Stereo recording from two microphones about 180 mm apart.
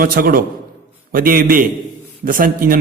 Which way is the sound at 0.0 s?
50° right (ahead or behind).